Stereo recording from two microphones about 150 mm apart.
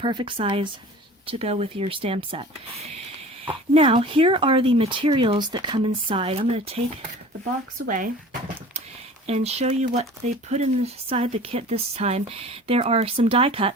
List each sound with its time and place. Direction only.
0.0 s speech: 35° right (ahead or behind)
7.9 s speech: 65° right (ahead or behind)
9.2 s speech: 45° right (ahead or behind)